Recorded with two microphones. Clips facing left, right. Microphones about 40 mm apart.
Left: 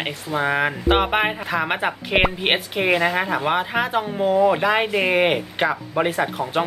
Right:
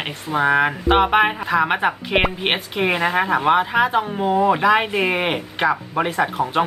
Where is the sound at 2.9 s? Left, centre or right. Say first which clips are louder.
Right 1 dB; centre.